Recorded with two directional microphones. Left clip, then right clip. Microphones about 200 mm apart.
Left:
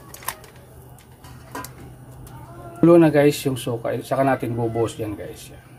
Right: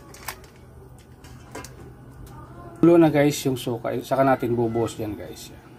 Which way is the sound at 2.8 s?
10° right (ahead or behind).